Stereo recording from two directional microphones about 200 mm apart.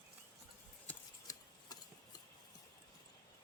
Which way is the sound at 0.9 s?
15° left (ahead or behind).